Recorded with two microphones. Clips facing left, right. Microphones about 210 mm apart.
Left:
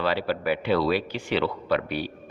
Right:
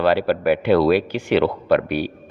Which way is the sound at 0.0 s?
55° right (ahead or behind).